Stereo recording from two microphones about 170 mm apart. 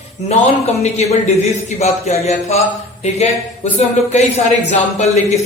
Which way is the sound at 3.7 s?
40° left (ahead or behind).